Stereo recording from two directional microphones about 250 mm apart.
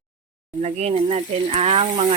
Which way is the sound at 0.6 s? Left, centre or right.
Right.